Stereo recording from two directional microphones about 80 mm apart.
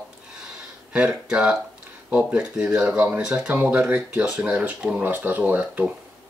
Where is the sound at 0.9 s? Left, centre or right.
Centre.